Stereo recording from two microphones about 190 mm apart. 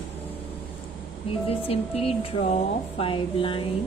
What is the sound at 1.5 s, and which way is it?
A woman's voice, 30° left (ahead or behind).